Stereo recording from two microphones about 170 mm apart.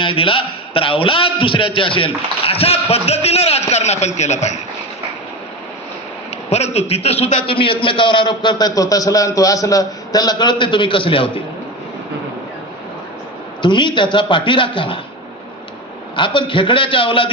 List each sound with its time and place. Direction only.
0.0 s a man's voice: 30° left (ahead or behind)
6.5 s a man's voice: 40° left (ahead or behind)
13.6 s a man's voice: 30° left (ahead or behind)
16.1 s a man's voice: 30° left (ahead or behind)